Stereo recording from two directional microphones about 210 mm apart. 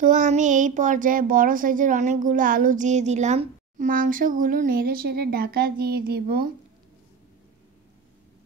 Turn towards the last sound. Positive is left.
turn(degrees=-45)  # may be behind; listen again after turning